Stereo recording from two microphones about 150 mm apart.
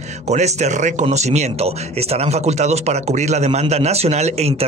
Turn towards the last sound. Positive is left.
turn(degrees=-45)  # may be behind; listen again after turning